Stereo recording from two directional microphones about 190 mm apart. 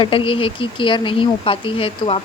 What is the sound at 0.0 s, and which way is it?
Speech, 30° left (ahead or behind).